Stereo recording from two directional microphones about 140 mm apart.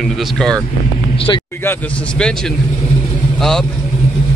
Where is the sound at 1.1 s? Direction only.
40° left (ahead or behind).